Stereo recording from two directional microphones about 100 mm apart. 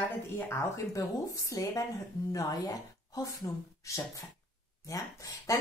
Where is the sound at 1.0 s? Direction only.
35° left (ahead or behind).